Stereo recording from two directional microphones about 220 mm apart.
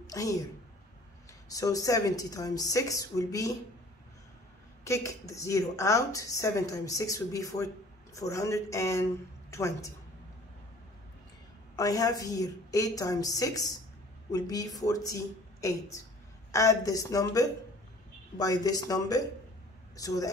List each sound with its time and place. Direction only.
0.0 s a woman's voice: 15° left (ahead or behind)
1.5 s a woman's voice: 15° left (ahead or behind)
4.8 s a woman's voice: 15° left (ahead or behind)
11.7 s a woman's voice: 15° left (ahead or behind)